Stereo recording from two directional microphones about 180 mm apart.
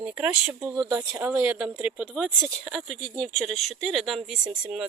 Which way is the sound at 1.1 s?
5° right (ahead or behind).